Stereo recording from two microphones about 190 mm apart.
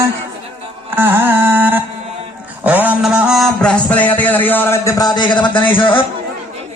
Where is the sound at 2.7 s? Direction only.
10° right (ahead or behind); by 4.8 s 10° left (ahead or behind).